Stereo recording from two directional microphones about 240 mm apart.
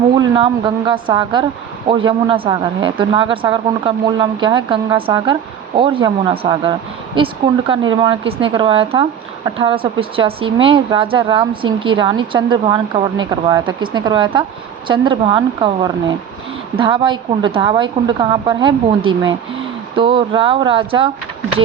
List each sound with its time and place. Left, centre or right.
0.2 s a woman's voice: centre